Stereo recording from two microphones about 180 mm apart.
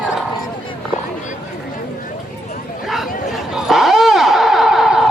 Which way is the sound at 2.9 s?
Centre (ahead or behind).